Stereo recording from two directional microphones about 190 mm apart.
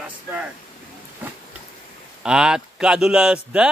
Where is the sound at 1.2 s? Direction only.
10° right (ahead or behind).